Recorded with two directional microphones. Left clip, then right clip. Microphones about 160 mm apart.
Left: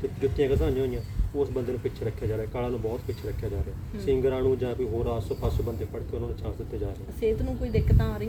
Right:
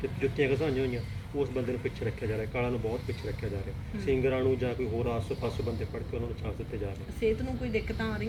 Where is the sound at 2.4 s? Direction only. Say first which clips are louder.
Right 1 dB; 20° left (ahead or behind).